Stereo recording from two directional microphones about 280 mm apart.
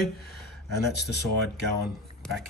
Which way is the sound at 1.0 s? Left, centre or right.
Left.